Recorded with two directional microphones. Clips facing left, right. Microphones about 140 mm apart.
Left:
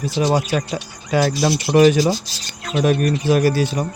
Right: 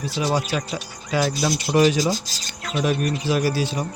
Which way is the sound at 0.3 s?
50° left (ahead or behind).